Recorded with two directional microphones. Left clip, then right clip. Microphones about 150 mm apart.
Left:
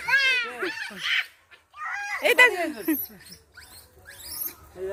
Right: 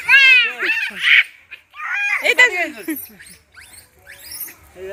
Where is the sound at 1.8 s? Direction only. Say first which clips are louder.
Right 11 dB; 50° left (ahead or behind).